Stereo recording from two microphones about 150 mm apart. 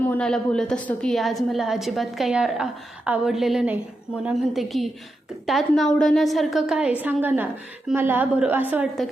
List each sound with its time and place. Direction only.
0.0 s a woman's voice: 10° left (ahead or behind); by 8.9 s 10° right (ahead or behind)